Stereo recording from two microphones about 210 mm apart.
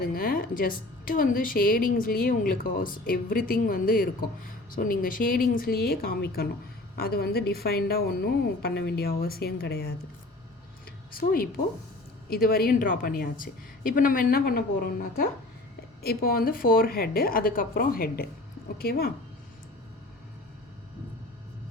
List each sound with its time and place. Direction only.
0.1 s a woman's voice: 40° left (ahead or behind)
11.1 s a woman's voice: 45° left (ahead or behind)